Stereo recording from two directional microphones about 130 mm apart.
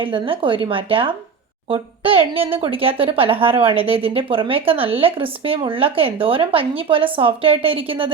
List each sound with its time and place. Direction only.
0.0 s speech: 40° right (ahead or behind)